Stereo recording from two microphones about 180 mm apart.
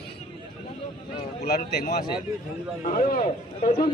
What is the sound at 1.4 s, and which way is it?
A man's voice, 60° left (ahead or behind).